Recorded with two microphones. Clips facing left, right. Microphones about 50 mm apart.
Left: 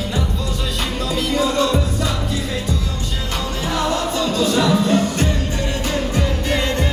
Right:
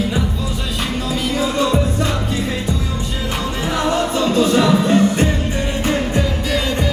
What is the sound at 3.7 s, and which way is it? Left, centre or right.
Music, right.